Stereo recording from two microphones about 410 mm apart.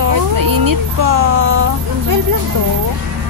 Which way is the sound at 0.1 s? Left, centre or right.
Right.